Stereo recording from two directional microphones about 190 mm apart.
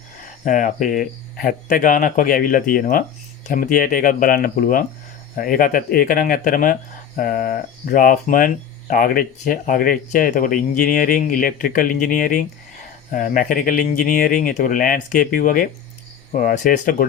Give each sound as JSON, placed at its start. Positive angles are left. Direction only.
{"t": 0.4, "sound": "speech", "side_deg": 45}